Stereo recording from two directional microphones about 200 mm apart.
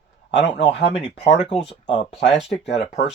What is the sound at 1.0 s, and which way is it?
Speech, 30° left (ahead or behind).